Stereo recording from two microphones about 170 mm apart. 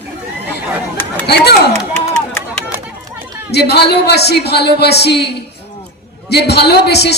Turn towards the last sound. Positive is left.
turn(degrees=75)  # may be behind; listen again after turning